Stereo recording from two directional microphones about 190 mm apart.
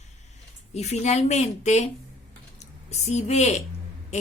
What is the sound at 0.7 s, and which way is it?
Speech, 35° left (ahead or behind).